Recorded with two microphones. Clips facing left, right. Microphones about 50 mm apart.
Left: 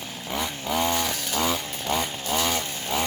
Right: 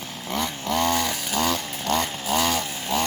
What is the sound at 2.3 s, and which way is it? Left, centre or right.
Chainsaw, centre.